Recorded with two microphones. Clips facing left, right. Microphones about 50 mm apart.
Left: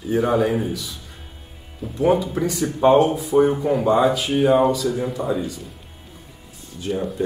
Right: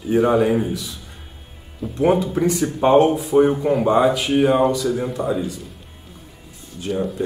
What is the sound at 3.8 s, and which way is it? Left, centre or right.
Speech, right.